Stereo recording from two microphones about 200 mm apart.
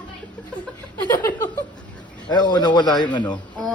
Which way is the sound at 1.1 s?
20° left (ahead or behind).